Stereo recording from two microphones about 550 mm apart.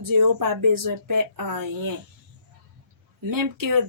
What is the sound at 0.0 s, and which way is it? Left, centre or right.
Speech, right.